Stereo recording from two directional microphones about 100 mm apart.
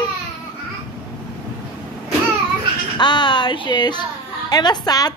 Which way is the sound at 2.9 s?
50° left (ahead or behind).